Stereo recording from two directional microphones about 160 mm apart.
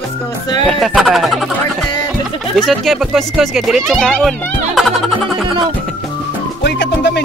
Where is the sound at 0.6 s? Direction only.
Centre (ahead or behind).